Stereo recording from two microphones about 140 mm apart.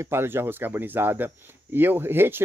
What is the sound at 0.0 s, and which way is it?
Speech, 15° right (ahead or behind).